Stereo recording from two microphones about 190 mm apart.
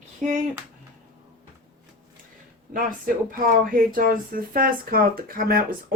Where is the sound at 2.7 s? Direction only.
50° right (ahead or behind).